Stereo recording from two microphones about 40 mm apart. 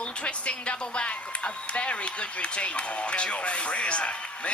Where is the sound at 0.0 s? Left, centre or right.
Left.